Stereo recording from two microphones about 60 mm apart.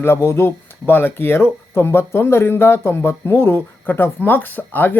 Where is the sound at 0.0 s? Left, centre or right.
Left.